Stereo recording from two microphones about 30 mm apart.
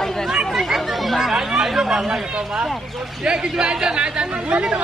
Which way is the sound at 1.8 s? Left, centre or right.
Right.